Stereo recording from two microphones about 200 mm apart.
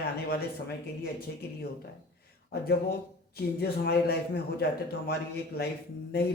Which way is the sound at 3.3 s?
55° left (ahead or behind).